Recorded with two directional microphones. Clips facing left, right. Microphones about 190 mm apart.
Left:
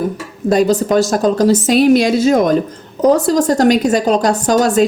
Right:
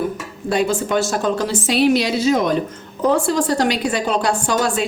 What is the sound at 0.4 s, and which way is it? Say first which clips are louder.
A woman's voice: left 7 dB; 40° left (ahead or behind).